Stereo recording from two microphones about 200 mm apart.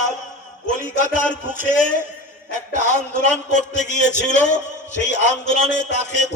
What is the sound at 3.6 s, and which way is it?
A man's voice, 35° left (ahead or behind).